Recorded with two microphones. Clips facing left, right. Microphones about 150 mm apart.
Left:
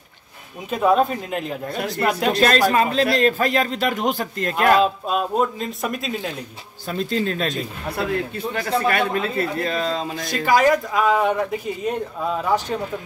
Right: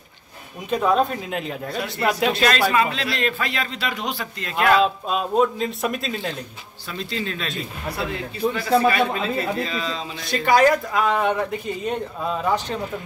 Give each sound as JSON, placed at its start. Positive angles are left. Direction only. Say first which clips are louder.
{"t": 0.7, "sound": "speech", "louder": "left 2 dB", "side_deg": 5}
{"t": 2.3, "sound": "a man's voice", "louder": "left 2 dB", "side_deg": 40}
{"t": 4.8, "sound": "speech", "louder": "left 1 dB", "side_deg": 0}
{"t": 6.9, "sound": "a man's voice", "louder": "left 6 dB", "side_deg": 45}
{"t": 8.5, "sound": "a man's voice", "louder": "right 2 dB", "side_deg": 50}
{"t": 10.4, "sound": "speech", "louder": "even", "side_deg": 0}